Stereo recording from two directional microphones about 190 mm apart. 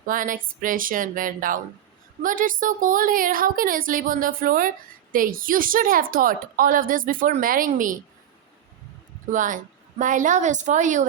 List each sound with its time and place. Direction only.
0.1 s speech: 45° right (ahead or behind)
9.3 s a woman's voice: 45° right (ahead or behind)